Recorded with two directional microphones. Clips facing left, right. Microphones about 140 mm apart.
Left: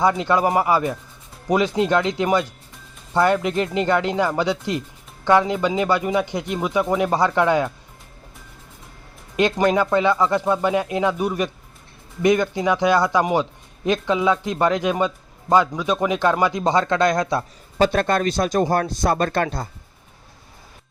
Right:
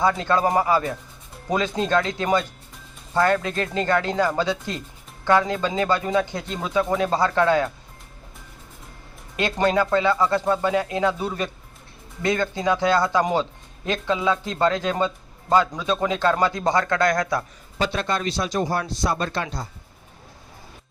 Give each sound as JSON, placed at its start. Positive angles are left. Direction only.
{"t": 0.0, "sound": "speech", "side_deg": 15}
{"t": 9.3, "sound": "speech", "side_deg": 15}
{"t": 17.7, "sound": "speech", "side_deg": 50}